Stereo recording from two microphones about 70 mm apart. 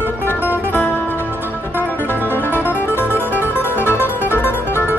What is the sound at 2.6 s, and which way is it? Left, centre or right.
Music, left.